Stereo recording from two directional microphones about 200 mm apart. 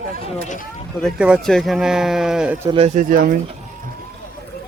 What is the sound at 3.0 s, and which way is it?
Speech, 45° right (ahead or behind).